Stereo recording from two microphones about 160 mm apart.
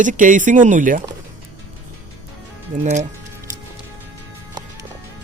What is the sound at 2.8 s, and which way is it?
Speech, 50° right (ahead or behind).